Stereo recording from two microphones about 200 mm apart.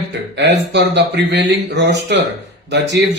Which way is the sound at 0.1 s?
60° right (ahead or behind).